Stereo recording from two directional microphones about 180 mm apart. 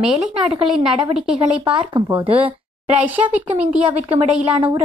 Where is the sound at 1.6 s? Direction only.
20° right (ahead or behind).